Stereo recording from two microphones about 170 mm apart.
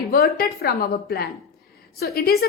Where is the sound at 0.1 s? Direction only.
65° left (ahead or behind).